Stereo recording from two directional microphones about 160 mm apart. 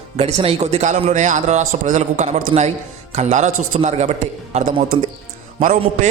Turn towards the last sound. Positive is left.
turn(degrees=-50)  # may be behind; listen again after turning